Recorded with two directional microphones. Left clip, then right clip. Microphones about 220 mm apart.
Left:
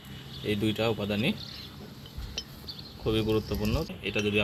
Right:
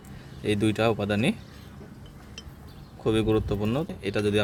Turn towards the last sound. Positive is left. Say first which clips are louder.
# right 3 dB
turn(degrees=-50)  # may be behind; listen again after turning